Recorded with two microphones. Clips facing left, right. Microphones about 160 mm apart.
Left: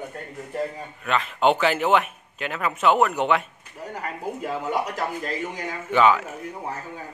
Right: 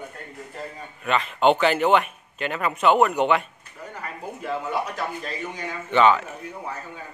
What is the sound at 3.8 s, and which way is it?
Speech, 40° left (ahead or behind).